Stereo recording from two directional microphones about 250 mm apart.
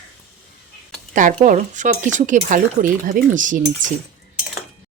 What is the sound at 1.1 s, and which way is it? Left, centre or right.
Speech, right.